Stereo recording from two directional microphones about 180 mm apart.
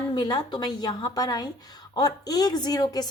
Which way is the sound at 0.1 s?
25° left (ahead or behind).